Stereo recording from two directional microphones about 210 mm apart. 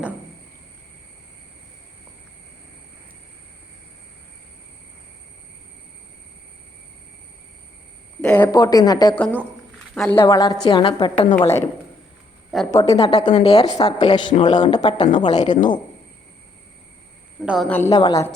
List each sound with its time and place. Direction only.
8.2 s speech: 10° left (ahead or behind)
9.1 s a woman's voice: 10° left (ahead or behind); by 11.3 s 25° left (ahead or behind)
11.3 s a woman's voice: 10° left (ahead or behind)
12.5 s a woman's voice: centre (ahead or behind)
13.0 s speech: 20° left (ahead or behind)
17.4 s a woman's voice: 5° right (ahead or behind)
17.7 s a woman's voice: 15° left (ahead or behind)